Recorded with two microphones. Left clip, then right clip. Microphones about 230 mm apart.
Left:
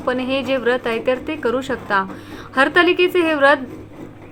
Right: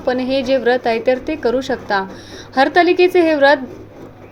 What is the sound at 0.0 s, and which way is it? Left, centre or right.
A woman's voice, centre.